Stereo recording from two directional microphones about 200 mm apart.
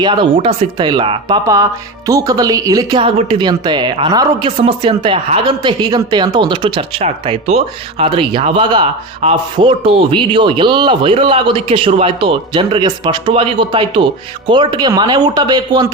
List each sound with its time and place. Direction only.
0.0 s a woman's voice: 25° right (ahead or behind)